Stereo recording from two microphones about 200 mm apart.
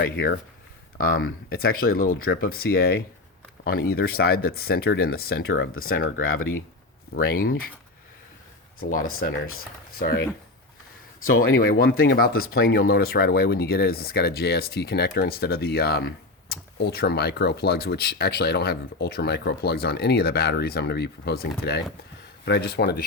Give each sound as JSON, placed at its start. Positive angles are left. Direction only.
{"t": 0.0, "sound": "speech", "side_deg": 45}
{"t": 8.8, "sound": "speech", "side_deg": 45}
{"t": 11.2, "sound": "speech", "side_deg": 90}
{"t": 11.5, "sound": "speech", "side_deg": 45}